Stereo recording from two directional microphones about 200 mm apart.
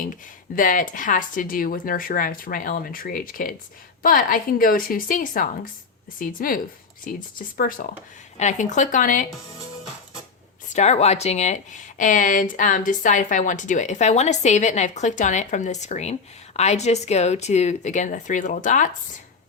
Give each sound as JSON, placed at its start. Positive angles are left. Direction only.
{"t": 0.5, "sound": "speech", "side_deg": 45}
{"t": 10.7, "sound": "speech", "side_deg": 35}